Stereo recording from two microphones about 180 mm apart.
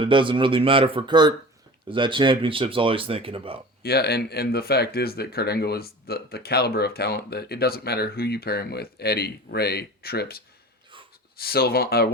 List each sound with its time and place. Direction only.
0.0 s speech: 25° right (ahead or behind)
3.8 s speech: 60° left (ahead or behind)